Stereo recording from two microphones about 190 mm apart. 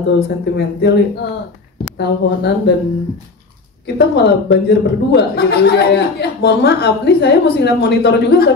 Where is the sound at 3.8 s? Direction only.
60° left (ahead or behind).